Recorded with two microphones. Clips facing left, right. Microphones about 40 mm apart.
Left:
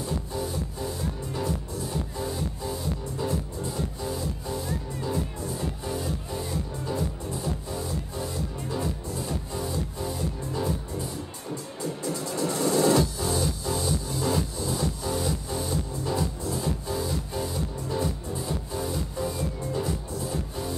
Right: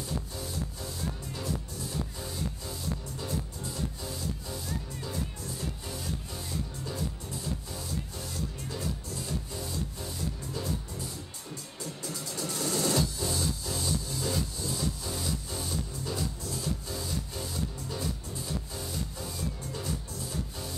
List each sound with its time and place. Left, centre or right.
0.0 s music: left
3.2 s music: left
11.8 s music: centre